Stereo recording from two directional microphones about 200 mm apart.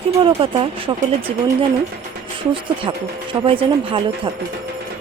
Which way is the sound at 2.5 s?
25° right (ahead or behind).